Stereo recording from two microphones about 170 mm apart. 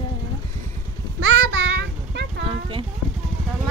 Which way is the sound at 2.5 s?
30° right (ahead or behind).